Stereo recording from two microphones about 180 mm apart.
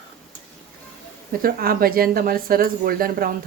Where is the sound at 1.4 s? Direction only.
55° right (ahead or behind).